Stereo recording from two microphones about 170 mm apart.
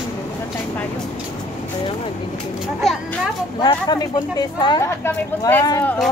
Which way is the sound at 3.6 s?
25° left (ahead or behind).